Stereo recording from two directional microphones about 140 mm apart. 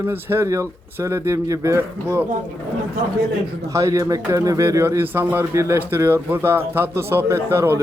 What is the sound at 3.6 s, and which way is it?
Speech, 20° right (ahead or behind).